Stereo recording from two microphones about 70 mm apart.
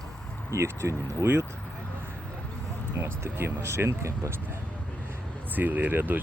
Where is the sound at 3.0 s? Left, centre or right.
Right.